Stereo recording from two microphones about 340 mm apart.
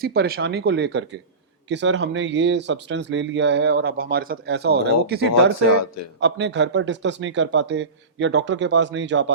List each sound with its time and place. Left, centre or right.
0.0 s speech: right